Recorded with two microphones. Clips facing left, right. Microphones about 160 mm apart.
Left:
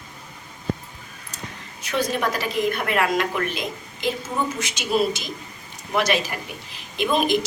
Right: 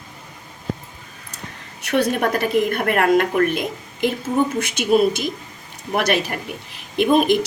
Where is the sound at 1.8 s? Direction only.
65° right (ahead or behind).